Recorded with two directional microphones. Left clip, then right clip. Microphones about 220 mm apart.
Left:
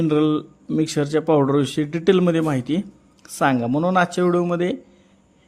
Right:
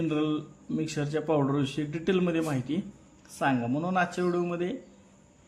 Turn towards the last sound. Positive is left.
turn(degrees=35)  # may be behind; listen again after turning